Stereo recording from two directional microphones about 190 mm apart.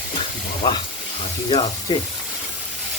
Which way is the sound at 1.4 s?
25° left (ahead or behind).